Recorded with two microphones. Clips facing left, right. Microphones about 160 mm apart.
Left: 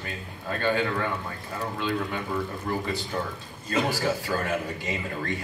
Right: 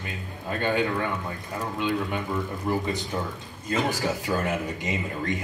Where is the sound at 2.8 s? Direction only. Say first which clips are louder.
Right 1 dB; 20° right (ahead or behind).